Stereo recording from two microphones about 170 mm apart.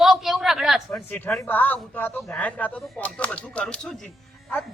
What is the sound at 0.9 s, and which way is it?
Speech, 10° left (ahead or behind).